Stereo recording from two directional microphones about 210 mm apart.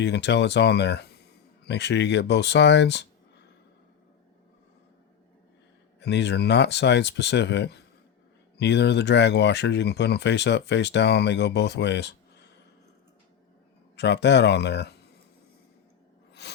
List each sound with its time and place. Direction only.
0.0 s speech: 55° left (ahead or behind)
6.0 s speech: 55° left (ahead or behind)
13.9 s speech: 55° left (ahead or behind)
16.4 s a sound: 55° left (ahead or behind)